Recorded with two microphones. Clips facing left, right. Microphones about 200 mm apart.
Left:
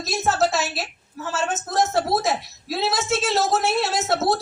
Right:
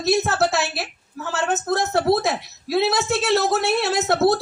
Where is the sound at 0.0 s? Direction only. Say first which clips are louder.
Right 2 dB; 60° right (ahead or behind).